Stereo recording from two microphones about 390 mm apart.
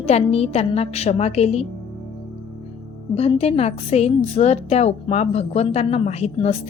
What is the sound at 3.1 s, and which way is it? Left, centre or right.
A woman's voice, centre.